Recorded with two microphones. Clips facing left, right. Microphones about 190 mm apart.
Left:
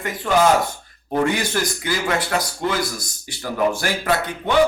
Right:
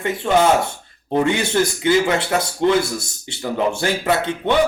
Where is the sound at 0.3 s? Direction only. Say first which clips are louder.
Right 1 dB; 25° right (ahead or behind).